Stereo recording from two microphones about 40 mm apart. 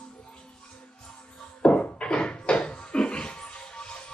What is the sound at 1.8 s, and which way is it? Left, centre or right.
Music, left.